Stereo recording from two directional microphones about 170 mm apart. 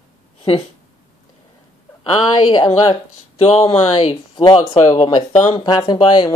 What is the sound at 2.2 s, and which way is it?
Speech, 25° left (ahead or behind).